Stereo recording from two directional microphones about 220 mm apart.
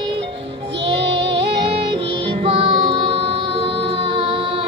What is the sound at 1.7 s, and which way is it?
Music, 25° right (ahead or behind).